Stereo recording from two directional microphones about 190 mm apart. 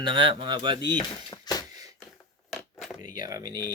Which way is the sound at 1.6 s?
20° right (ahead or behind).